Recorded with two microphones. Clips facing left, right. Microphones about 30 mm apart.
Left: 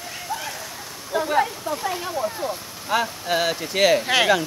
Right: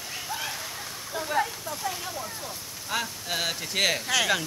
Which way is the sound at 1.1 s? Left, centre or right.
Left.